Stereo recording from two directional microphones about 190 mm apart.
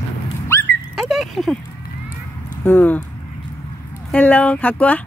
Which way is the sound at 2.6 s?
10° left (ahead or behind).